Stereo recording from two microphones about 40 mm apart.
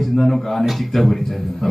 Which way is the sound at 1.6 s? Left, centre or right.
Centre.